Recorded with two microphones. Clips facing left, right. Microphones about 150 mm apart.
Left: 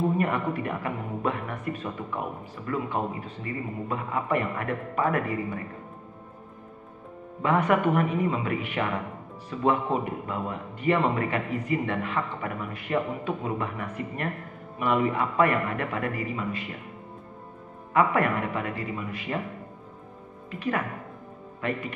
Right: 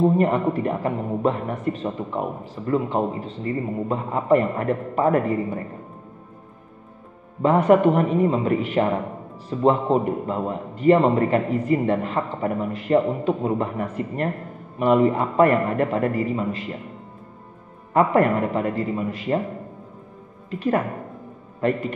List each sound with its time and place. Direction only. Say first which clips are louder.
0.0 s a man's voice: right 7 dB; 30° right (ahead or behind)
7.4 s speech: right 7 dB; 30° right (ahead or behind)
17.9 s speech: right 5 dB; 35° right (ahead or behind)
20.5 s a man's voice: right 7 dB; 40° right (ahead or behind)